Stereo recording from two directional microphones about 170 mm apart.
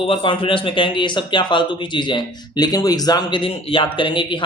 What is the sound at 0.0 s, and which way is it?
Speech, 30° left (ahead or behind).